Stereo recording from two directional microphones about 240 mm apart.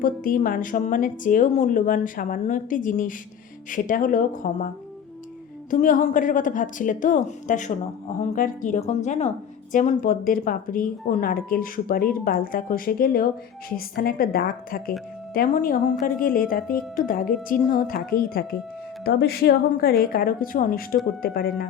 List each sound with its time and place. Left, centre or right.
0.0 s speech: left
5.7 s a woman's voice: left